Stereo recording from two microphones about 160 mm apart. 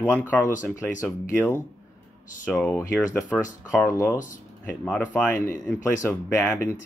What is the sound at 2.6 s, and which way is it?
Speech, 15° left (ahead or behind).